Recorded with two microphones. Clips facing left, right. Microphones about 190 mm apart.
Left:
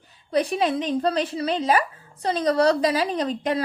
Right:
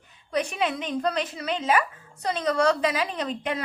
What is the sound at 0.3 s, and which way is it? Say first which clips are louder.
A woman's voice: left 4 dB; 35° left (ahead or behind).